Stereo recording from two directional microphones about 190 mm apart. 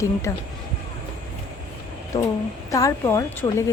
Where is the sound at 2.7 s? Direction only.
15° left (ahead or behind).